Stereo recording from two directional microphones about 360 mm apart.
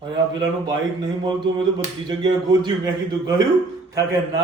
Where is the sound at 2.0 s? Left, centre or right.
Centre.